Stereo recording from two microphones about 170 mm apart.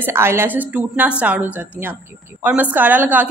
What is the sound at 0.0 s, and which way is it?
A woman's voice, 15° right (ahead or behind).